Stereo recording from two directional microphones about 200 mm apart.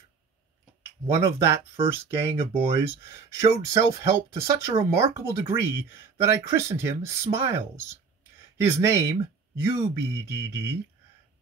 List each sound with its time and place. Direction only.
1.2 s speech: 15° right (ahead or behind)
1.9 s speech: 30° right (ahead or behind)
2.8 s speech: 15° right (ahead or behind)